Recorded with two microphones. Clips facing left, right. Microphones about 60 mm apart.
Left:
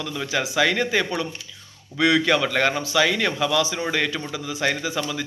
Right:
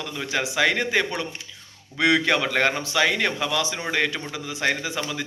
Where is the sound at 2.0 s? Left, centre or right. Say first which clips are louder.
Left 1 dB; right.